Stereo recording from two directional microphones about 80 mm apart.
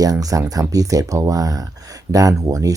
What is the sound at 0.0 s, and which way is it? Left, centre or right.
Speech, right.